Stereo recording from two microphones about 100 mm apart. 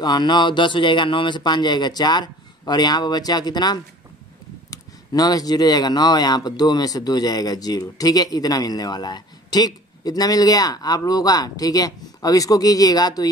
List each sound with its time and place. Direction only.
0.0 s speech: 45° left (ahead or behind)